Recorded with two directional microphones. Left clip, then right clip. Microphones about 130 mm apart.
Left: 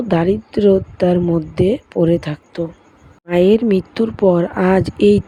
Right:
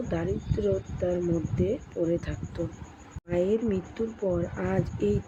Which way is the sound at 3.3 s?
90° left.